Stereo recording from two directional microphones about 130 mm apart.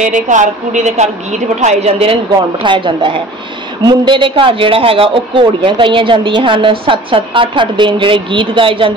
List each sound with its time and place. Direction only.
0.0 s a woman's voice: 75° right (ahead or behind); by 2.1 s 50° right (ahead or behind)
2.6 s speech: 40° right (ahead or behind)